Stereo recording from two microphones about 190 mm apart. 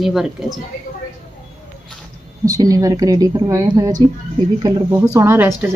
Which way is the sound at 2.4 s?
20° right (ahead or behind).